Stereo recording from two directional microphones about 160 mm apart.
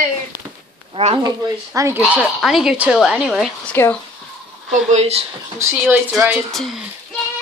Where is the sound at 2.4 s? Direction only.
5° right (ahead or behind).